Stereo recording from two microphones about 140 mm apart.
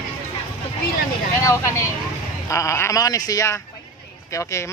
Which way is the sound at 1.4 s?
20° left (ahead or behind).